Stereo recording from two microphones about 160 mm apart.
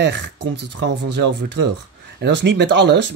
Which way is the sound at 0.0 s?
90° right.